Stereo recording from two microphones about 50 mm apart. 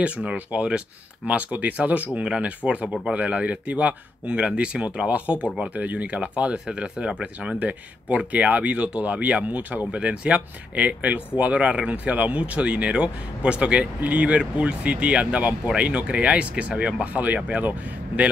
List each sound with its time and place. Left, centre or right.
0.0 s speech: right